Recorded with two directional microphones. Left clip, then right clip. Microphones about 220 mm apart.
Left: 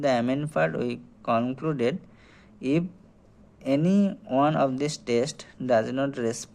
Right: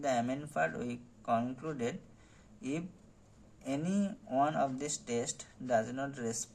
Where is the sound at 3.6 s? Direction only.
55° left (ahead or behind).